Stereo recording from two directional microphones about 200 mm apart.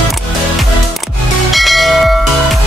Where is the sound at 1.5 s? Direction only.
Centre (ahead or behind).